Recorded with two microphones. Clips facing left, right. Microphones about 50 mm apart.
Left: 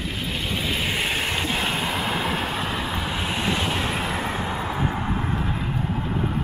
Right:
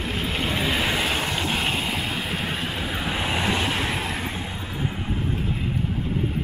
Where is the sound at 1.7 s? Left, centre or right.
Left.